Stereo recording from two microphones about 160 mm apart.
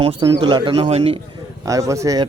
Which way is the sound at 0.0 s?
35° right (ahead or behind).